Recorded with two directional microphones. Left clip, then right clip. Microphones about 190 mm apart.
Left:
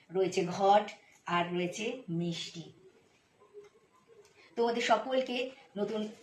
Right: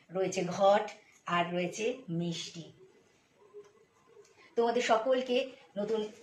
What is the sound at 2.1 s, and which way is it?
Speech, 20° right (ahead or behind).